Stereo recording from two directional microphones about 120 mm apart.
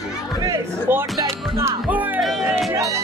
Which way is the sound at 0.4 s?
20° right (ahead or behind).